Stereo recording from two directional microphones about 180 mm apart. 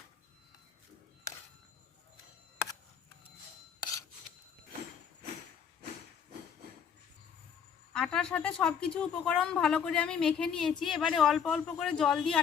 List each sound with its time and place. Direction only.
3.8 s filing: 20° left (ahead or behind)
7.9 s speech: 5° left (ahead or behind)